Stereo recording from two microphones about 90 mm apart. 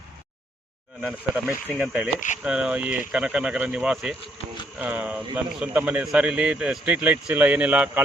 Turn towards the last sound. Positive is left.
turn(degrees=-20)  # may be behind; listen again after turning